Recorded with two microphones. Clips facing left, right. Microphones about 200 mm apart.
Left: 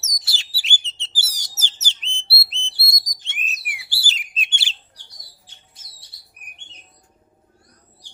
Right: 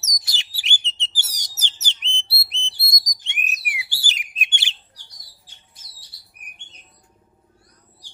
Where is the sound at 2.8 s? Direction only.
15° right (ahead or behind).